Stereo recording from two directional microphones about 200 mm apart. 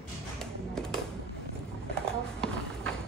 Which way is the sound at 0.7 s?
5° left (ahead or behind).